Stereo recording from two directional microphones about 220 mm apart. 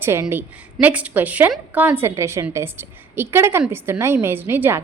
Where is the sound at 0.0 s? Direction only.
10° right (ahead or behind).